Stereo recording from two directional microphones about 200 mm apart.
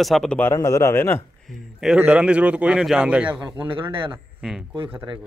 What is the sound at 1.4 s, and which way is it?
A man's voice, centre (ahead or behind).